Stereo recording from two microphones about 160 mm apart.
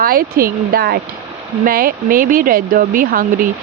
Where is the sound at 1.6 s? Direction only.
65° right (ahead or behind).